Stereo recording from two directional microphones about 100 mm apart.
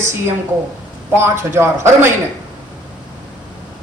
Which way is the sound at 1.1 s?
25° right (ahead or behind).